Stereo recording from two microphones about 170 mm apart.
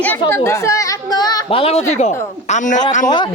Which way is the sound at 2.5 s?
45° left (ahead or behind).